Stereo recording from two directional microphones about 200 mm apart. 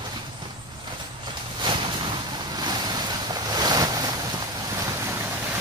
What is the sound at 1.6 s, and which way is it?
Boat, 25° right (ahead or behind).